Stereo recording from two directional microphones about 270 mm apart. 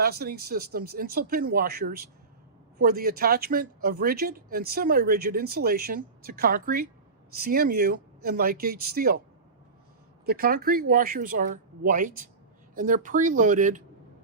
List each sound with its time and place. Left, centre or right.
0.0 s speech: right
10.2 s speech: right